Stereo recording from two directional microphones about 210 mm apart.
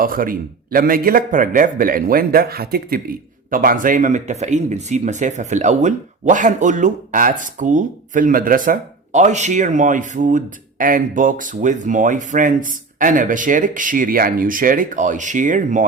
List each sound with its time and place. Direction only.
0.0 s a man's voice: 40° right (ahead or behind)